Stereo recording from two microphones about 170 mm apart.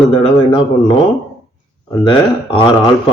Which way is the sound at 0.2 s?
30° left (ahead or behind).